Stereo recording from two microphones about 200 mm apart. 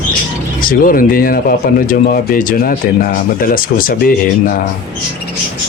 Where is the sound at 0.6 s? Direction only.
45° left (ahead or behind).